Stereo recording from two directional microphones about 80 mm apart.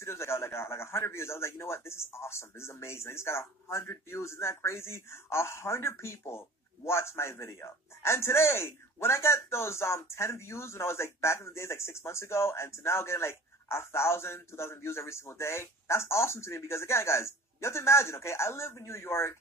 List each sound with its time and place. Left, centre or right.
0.0 s a man's voice: left